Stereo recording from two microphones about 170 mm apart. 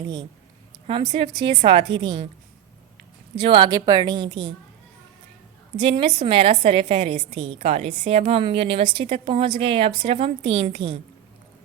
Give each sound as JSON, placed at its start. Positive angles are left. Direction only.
{"t": 0.9, "sound": "a woman's voice", "side_deg": -30}
{"t": 3.4, "sound": "a woman's voice", "side_deg": -25}
{"t": 5.8, "sound": "a woman's voice", "side_deg": -30}